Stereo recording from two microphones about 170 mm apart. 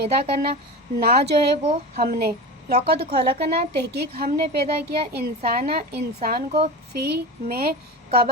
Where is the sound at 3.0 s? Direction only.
40° right (ahead or behind).